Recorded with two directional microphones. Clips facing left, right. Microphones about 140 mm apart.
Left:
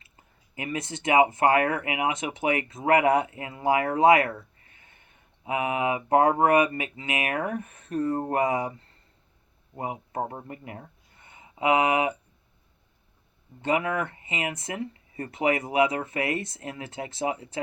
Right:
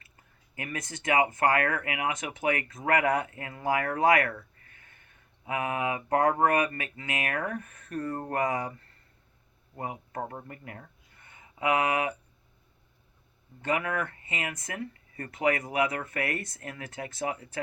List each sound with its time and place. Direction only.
0.5 s speech: 20° left (ahead or behind)
9.7 s speech: 20° left (ahead or behind)
13.6 s speech: 25° left (ahead or behind)